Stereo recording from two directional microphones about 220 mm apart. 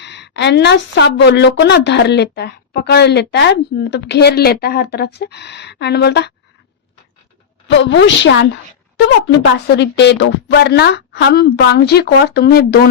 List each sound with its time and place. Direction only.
0.0 s a woman's voice: 50° left (ahead or behind)
7.7 s a woman's voice: 55° left (ahead or behind)